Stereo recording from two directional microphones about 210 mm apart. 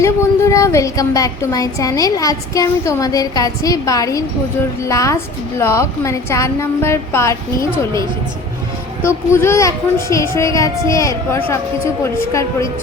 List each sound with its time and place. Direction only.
0.0 s a woman's voice: 15° left (ahead or behind)
9.0 s a woman's voice: 10° left (ahead or behind)